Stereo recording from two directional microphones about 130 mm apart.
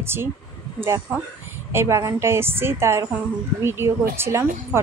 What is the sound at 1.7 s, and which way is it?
Speech, 20° right (ahead or behind).